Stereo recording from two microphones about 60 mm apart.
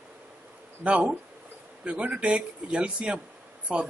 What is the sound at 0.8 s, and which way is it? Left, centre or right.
Speech, centre.